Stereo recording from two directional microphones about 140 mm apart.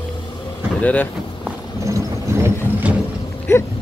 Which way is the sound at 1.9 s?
20° right (ahead or behind).